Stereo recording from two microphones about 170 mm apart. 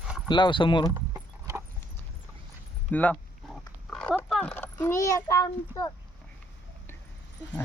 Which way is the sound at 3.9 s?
5° left (ahead or behind).